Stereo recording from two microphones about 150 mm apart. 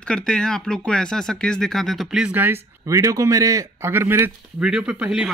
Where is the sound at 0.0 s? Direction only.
5° left (ahead or behind).